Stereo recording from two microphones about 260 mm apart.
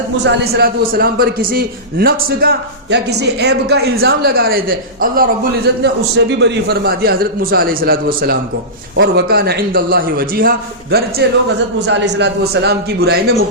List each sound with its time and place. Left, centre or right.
0.3 s a man's voice: right